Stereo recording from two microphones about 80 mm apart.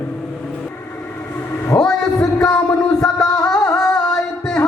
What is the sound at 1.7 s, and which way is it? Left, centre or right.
Speech, left.